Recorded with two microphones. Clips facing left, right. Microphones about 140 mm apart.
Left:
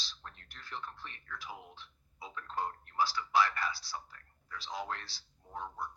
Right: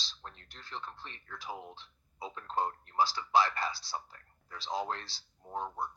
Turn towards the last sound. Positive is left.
turn(degrees=-30)  # may be behind; listen again after turning